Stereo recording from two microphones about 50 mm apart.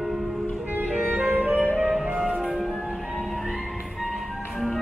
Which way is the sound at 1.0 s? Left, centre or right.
Centre.